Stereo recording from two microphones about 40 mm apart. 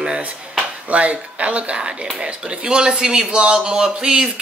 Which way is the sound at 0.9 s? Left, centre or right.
Right.